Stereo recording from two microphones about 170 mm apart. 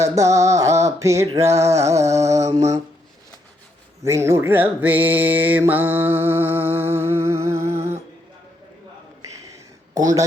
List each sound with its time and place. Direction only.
0.0 s music: 20° right (ahead or behind)
1.4 s mantra: 15° right (ahead or behind)
4.0 s mantra: 15° right (ahead or behind)
9.9 s speech: 20° right (ahead or behind)